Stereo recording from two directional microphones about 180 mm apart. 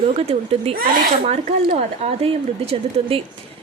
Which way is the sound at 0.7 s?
55° right (ahead or behind).